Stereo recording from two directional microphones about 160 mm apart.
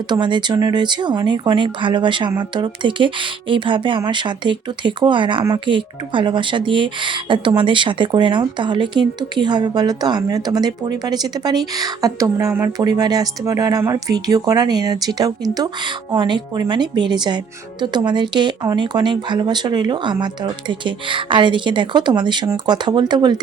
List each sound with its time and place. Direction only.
0.1 s speech: 30° right (ahead or behind)